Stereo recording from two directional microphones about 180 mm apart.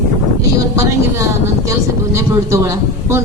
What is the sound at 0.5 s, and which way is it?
A man's voice, 15° right (ahead or behind).